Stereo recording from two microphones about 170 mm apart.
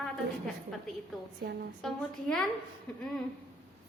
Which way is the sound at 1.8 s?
Centre (ahead or behind).